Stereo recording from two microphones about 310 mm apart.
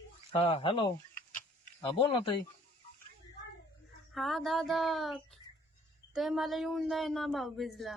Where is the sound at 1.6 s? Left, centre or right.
Centre.